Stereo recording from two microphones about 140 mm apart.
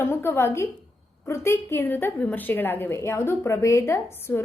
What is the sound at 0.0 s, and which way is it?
A woman's voice, 15° left (ahead or behind).